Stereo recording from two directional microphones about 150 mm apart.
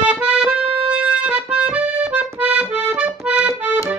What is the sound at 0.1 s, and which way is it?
Music, 5° right (ahead or behind).